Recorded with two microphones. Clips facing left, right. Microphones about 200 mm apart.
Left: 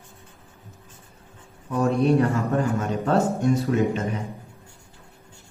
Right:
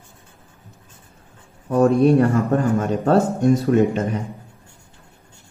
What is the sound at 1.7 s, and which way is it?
Speech, 45° right (ahead or behind).